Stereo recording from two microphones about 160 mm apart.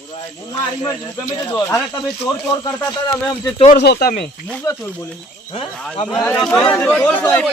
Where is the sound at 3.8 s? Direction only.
80° left.